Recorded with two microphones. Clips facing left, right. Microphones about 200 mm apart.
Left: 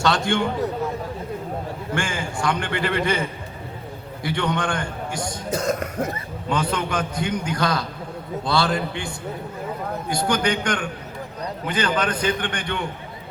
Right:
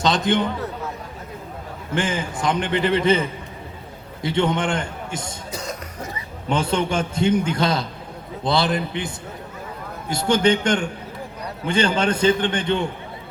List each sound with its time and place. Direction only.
0.0 s a man's voice: 20° right (ahead or behind)
2.0 s a man's voice: 20° right (ahead or behind)
5.5 s speech: 50° left (ahead or behind)
6.5 s a man's voice: 25° right (ahead or behind)